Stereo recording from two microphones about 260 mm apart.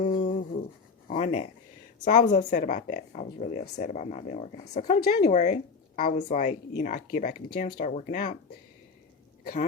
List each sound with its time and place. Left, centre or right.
0.0 s a sound: left
1.1 s a woman's voice: left
9.4 s speech: left